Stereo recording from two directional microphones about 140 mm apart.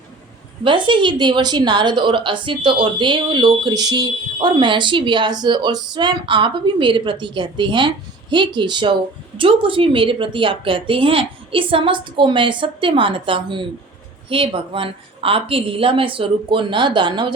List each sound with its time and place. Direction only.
0.6 s a woman's voice: 35° right (ahead or behind)